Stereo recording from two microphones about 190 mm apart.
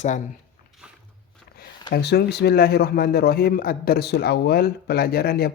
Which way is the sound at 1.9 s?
60° left (ahead or behind).